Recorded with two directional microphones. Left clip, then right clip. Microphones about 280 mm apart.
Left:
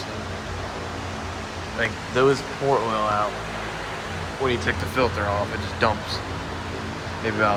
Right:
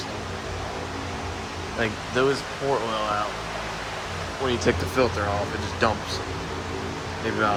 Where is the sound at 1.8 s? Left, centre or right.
Centre.